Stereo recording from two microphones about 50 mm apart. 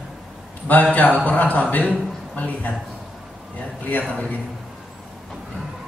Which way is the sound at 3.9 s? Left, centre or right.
Left.